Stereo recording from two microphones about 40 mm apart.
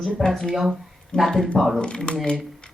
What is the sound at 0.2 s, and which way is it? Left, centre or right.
Speech, centre.